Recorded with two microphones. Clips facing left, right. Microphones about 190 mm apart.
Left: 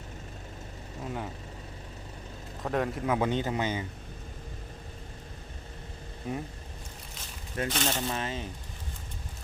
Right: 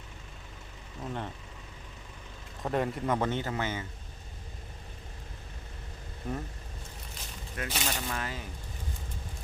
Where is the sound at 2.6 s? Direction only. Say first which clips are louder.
Left 1 dB; centre (ahead or behind); by 3.8 s 15° left (ahead or behind).